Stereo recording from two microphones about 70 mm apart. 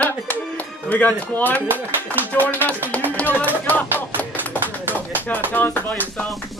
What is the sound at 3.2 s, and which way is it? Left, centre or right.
Music, left.